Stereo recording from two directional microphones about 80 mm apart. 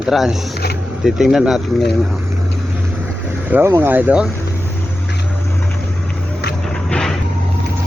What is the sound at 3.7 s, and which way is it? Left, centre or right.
Speech, right.